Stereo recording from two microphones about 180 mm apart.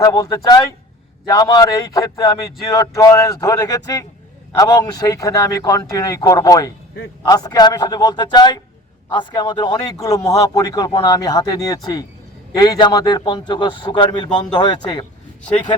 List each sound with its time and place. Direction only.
0.0 s a man's voice: 20° left (ahead or behind)